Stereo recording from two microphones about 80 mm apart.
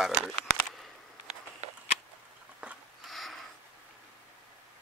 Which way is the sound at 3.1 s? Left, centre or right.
Centre.